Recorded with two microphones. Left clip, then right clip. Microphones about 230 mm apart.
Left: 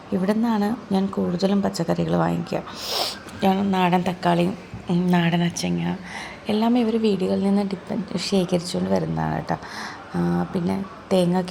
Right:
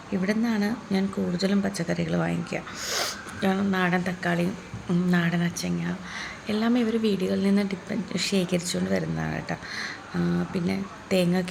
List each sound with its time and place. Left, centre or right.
0.2 s a woman's voice: centre
3.4 s a woman's voice: centre